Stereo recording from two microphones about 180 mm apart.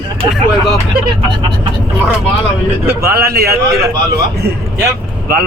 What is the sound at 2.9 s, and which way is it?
Speech, 60° right (ahead or behind).